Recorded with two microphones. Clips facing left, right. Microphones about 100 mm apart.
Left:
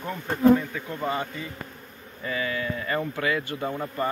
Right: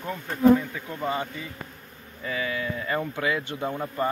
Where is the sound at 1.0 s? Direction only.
10° right (ahead or behind).